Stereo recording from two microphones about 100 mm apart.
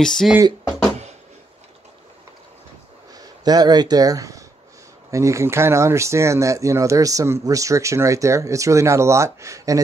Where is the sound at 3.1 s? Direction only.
40° right (ahead or behind).